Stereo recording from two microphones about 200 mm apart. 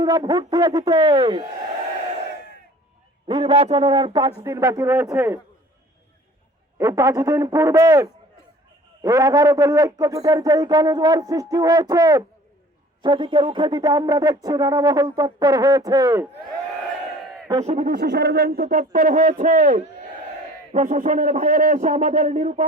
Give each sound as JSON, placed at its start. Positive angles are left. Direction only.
{"t": 0.0, "sound": "speech", "side_deg": -20}
{"t": 3.2, "sound": "speech", "side_deg": -25}
{"t": 6.7, "sound": "speech", "side_deg": -15}
{"t": 17.8, "sound": "a man's voice", "side_deg": -50}